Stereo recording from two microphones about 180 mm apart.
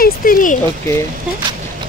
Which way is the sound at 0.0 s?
50° left (ahead or behind).